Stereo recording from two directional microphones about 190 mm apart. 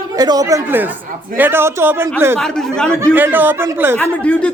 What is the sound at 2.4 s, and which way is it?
Speech, 5° left (ahead or behind).